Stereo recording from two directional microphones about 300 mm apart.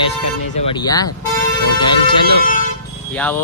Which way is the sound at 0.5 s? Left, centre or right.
Centre.